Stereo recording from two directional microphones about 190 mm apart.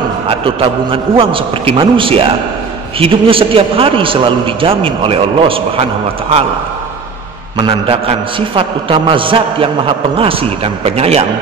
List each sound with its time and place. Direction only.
1.1 s a man's voice: 25° right (ahead or behind)
7.5 s a man's voice: 25° right (ahead or behind)